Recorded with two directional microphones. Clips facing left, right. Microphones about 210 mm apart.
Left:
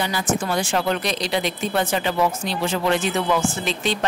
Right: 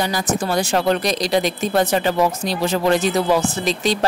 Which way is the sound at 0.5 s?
40° right (ahead or behind).